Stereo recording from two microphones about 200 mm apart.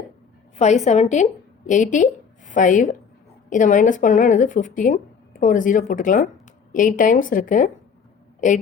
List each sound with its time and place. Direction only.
0.5 s a woman's voice: 35° left (ahead or behind)